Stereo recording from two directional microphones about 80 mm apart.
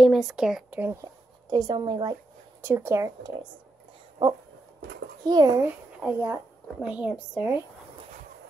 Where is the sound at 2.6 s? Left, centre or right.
Right.